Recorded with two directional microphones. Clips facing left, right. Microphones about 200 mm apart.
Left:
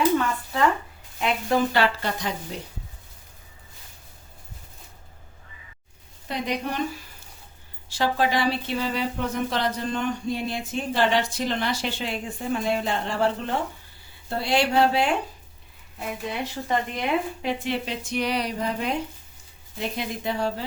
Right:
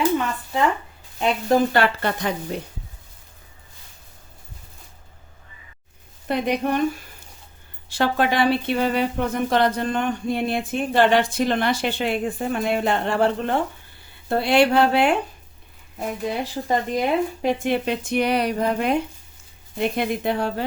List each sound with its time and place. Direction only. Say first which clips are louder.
1.7 s speech: right 3 dB; 55° right (ahead or behind)
6.2 s speech: right 6 dB; 55° right (ahead or behind)
7.9 s speech: right 3 dB; 60° right (ahead or behind)
16.0 s speech: right 4 dB; 40° right (ahead or behind); by 20.7 s 60° right (ahead or behind)